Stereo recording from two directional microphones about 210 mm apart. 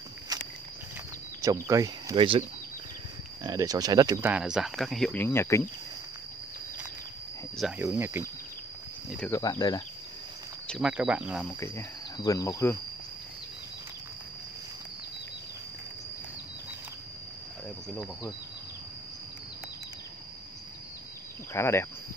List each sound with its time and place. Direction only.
0.3 s a sound: 20° right (ahead or behind)
1.4 s speech: 15° right (ahead or behind)
3.4 s speech: 15° right (ahead or behind)
4.3 s speech: 5° right (ahead or behind)
7.5 s speech: 5° right (ahead or behind)
9.1 s speech: 5° left (ahead or behind)
9.4 s cricket: 20° left (ahead or behind)
10.7 s speech: 5° right (ahead or behind)
11.4 s cricket: 10° left (ahead or behind)
21.5 s cricket: 10° left (ahead or behind)